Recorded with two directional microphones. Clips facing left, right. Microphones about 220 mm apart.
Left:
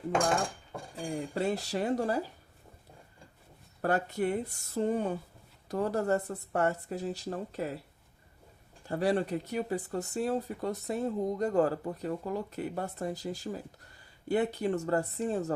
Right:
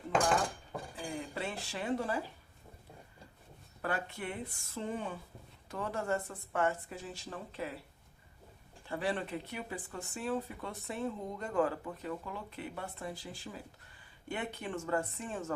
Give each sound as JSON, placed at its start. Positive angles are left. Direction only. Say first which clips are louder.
{"t": 0.9, "sound": "a sound", "louder": "left 8 dB", "side_deg": 40}
{"t": 3.8, "sound": "speech", "louder": "left 8 dB", "side_deg": 40}
{"t": 8.9, "sound": "speech", "louder": "left 7 dB", "side_deg": 40}